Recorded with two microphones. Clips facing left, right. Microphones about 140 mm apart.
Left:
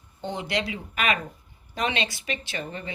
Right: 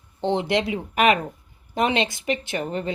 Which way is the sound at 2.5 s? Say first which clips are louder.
Right 8 dB; 70° right (ahead or behind).